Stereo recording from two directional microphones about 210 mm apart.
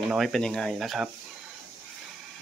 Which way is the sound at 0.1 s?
Centre (ahead or behind).